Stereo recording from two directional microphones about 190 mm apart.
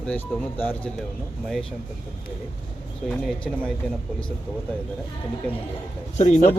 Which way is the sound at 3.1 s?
5° left (ahead or behind).